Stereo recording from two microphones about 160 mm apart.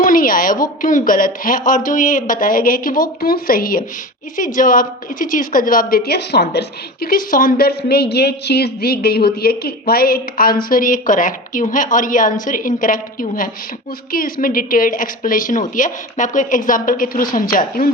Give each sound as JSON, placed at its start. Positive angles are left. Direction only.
{"t": 0.0, "sound": "a woman's voice", "side_deg": 60}